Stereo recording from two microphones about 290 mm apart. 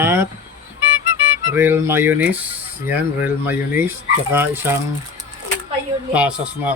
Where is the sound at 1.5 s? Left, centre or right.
Centre.